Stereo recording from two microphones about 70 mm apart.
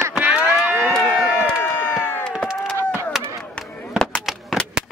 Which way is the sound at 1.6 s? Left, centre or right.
Left.